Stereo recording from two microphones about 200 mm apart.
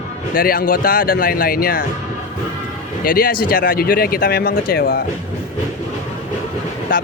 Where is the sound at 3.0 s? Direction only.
45° left (ahead or behind).